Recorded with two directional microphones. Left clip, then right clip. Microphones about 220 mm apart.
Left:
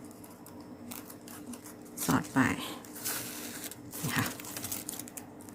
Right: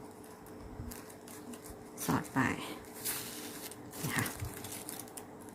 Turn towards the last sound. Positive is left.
turn(degrees=5)  # may be behind; listen again after turning